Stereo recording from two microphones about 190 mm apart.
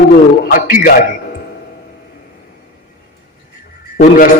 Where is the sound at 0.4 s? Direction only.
50° left (ahead or behind).